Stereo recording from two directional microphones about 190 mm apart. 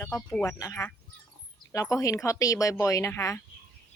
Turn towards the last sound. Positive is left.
turn(degrees=15)  # may be behind; listen again after turning